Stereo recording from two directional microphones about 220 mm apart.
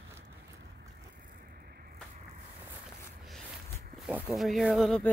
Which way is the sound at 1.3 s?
40° right (ahead or behind).